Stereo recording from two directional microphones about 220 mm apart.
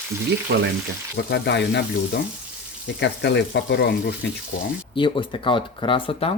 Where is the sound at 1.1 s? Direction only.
50° left (ahead or behind).